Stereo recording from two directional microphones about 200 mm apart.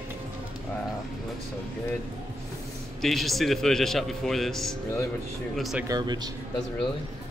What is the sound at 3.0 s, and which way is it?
Speech, centre (ahead or behind).